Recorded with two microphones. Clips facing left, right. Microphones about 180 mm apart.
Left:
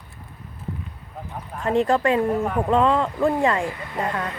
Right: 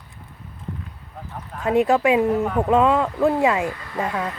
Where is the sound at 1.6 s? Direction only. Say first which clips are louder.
Right 2 dB; 5° right (ahead or behind).